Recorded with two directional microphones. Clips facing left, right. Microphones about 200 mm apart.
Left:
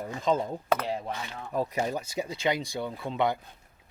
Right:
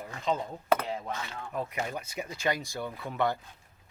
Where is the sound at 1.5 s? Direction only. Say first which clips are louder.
Left 6 dB; 35° left (ahead or behind).